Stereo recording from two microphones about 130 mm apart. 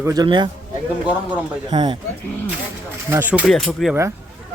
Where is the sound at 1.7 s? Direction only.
35° right (ahead or behind).